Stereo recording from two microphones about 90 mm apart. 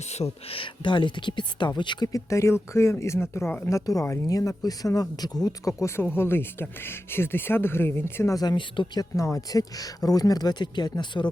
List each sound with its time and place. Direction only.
0.4 s speech: 80° left; by 2.0 s 55° left (ahead or behind)
2.1 s speech: 30° left (ahead or behind)
6.0 s speech: 25° left (ahead or behind)
8.5 s speech: 65° left (ahead or behind)
9.0 s speech: 40° left (ahead or behind); by 11.3 s 60° left (ahead or behind)